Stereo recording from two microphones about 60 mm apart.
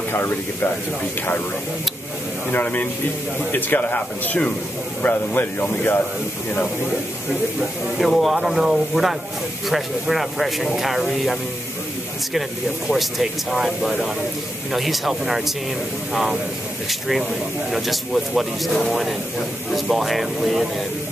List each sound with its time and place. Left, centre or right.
0.1 s a man's voice: left
2.5 s a man's voice: left
8.0 s speech: centre
12.4 s speech: centre